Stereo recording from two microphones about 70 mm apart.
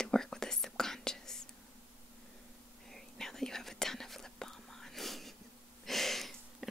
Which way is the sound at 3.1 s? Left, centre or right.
Centre.